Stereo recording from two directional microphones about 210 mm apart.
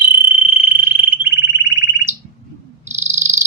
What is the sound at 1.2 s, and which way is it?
Fire alarm, 60° left (ahead or behind).